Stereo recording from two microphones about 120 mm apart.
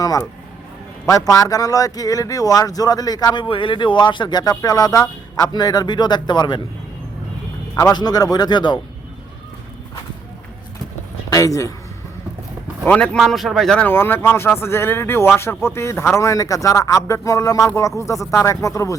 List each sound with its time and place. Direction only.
0.0 s a sound: 30° left (ahead or behind)
1.0 s speech: 30° left (ahead or behind)
7.8 s speech: 30° left (ahead or behind)
11.3 s speech: 30° left (ahead or behind)
12.8 s speech: 10° left (ahead or behind)
13.8 s speech: 15° left (ahead or behind)